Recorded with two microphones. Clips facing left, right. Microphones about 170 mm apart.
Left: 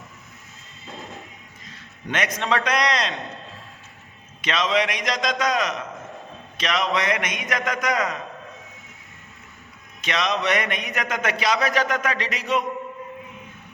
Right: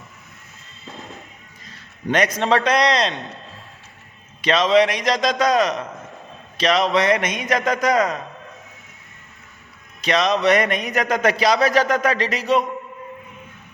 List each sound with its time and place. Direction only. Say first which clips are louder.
0.9 s music: even; centre (ahead or behind)
2.0 s speech: right 7 dB; 35° right (ahead or behind)
2.6 s a man's voice: right 5 dB; 25° right (ahead or behind)
4.4 s speech: right 7 dB; 35° right (ahead or behind)
10.0 s speech: right 6 dB; 35° right (ahead or behind)